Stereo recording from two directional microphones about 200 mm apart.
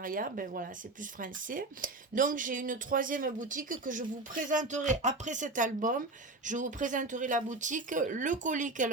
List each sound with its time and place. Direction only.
0.0 s speech: 45° right (ahead or behind)